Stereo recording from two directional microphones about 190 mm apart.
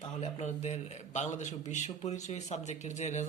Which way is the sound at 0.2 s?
35° left (ahead or behind).